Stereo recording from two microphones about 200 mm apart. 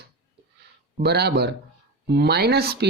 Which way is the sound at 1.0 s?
55° right (ahead or behind).